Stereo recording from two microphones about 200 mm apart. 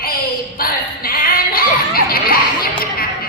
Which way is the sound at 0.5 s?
45° left (ahead or behind).